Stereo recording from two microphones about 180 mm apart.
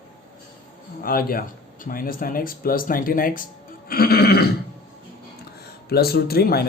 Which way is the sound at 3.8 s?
55° left (ahead or behind).